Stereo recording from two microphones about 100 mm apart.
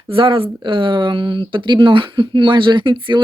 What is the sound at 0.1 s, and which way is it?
Speech, 65° right (ahead or behind).